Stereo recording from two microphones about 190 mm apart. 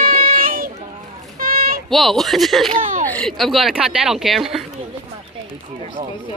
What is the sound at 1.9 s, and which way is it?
Speech, centre (ahead or behind).